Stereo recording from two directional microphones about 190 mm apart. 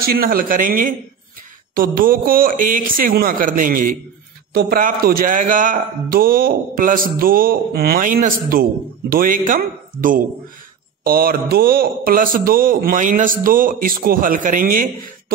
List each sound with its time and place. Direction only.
0.0 s a man's voice: 50° right (ahead or behind)